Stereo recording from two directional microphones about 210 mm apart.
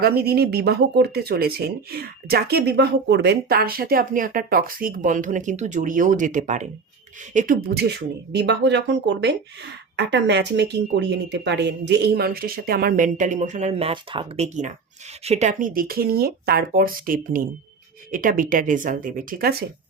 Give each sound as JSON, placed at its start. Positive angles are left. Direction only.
{"t": 0.0, "sound": "speech", "side_deg": -50}